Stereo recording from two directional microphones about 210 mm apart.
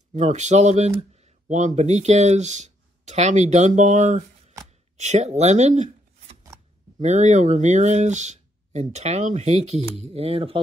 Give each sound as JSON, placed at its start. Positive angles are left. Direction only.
{"t": 0.1, "sound": "speech", "side_deg": -35}